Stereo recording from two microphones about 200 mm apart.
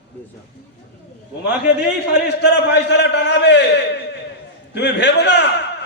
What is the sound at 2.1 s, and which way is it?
A man's voice, 60° left (ahead or behind).